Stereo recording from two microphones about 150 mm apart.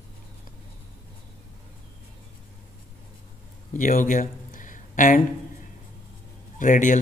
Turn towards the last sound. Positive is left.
turn(degrees=60)  # may be behind; listen again after turning